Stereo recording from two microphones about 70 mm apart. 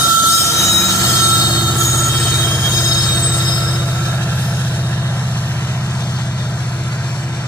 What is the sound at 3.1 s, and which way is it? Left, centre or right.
Train, right.